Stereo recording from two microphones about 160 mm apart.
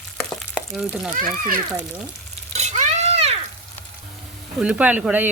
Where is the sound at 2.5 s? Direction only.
45° right (ahead or behind).